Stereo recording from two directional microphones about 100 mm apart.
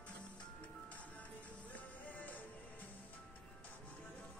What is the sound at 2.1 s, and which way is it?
Music, 15° left (ahead or behind).